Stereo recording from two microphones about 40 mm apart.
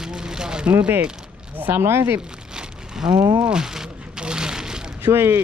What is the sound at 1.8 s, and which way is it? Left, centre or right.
Speech, right.